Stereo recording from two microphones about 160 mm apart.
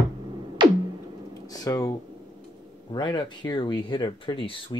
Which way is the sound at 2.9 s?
30° left (ahead or behind).